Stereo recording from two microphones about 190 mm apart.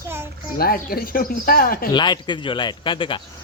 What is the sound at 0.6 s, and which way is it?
Speech, 50° left (ahead or behind).